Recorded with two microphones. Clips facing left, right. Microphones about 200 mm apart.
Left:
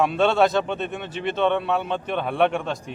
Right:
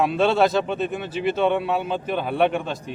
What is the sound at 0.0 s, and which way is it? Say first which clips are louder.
A man's voice: even; centre (ahead or behind).